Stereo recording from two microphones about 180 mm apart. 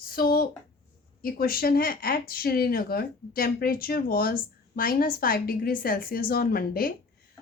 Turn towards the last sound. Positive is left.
turn(degrees=55)  # may be behind; listen again after turning